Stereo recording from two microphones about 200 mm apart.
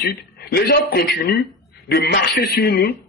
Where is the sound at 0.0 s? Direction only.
50° left (ahead or behind).